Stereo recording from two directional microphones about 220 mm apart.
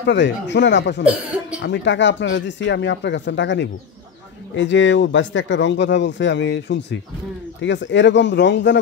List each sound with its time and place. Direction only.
0.0 s speech: 55° left (ahead or behind)
1.0 s speech: 5° right (ahead or behind)
1.6 s speech: 55° left (ahead or behind)